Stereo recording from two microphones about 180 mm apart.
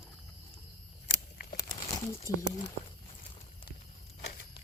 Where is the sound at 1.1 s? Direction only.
55° left (ahead or behind).